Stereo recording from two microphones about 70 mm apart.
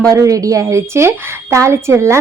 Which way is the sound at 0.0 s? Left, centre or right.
Right.